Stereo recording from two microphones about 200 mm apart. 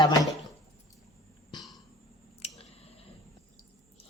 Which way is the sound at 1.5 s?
20° left (ahead or behind).